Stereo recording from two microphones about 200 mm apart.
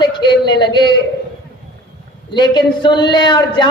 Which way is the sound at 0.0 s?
20° left (ahead or behind).